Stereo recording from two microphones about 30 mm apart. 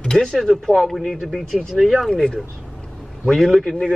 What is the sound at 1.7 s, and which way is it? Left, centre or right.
Speech, centre.